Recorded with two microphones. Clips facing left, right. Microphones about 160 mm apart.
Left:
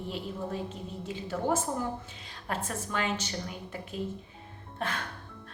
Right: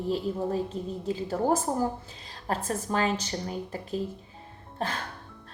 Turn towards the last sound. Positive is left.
turn(degrees=-30)  # may be behind; listen again after turning